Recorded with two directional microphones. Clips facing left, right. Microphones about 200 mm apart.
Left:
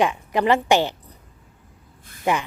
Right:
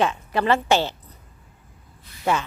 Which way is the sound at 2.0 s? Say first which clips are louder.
Left 1 dB; 50° left (ahead or behind).